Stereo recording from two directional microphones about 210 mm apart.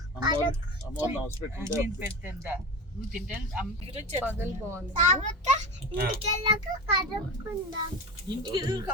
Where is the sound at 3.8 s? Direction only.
30° right (ahead or behind).